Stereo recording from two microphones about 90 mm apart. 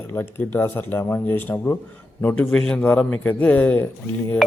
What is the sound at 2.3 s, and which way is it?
A man's voice, 10° left (ahead or behind).